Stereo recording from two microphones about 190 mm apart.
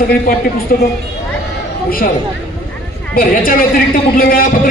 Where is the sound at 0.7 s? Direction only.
50° left (ahead or behind).